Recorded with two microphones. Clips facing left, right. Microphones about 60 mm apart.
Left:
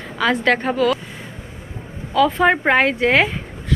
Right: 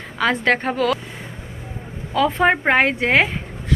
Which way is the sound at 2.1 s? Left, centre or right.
Right.